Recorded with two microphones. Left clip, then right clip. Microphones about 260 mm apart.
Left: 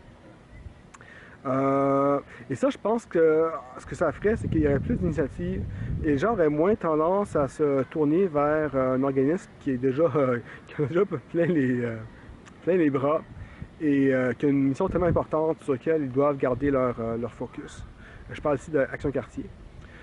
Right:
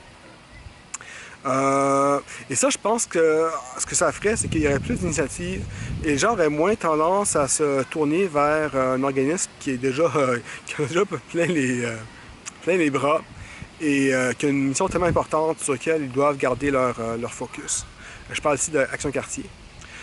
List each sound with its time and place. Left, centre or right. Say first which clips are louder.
1.5 s a sound: right 4 dB; centre
2.5 s speech: right 4 dB; centre
18.6 s speech: right 3 dB; centre